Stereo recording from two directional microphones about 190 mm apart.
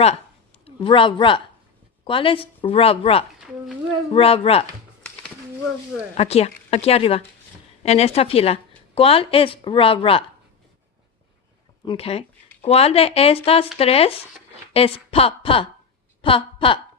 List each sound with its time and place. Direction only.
0.6 s a woman's voice: 30° left (ahead or behind)
6.1 s a woman's voice: 35° left (ahead or behind)
11.9 s a woman's voice: 30° left (ahead or behind)